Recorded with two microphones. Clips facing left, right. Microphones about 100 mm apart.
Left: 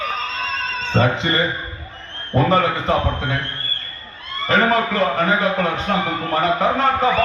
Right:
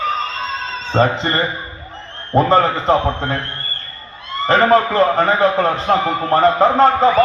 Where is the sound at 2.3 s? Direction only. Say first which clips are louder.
Right 3 dB; 35° right (ahead or behind).